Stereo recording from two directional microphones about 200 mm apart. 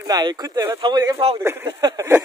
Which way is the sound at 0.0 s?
20° right (ahead or behind).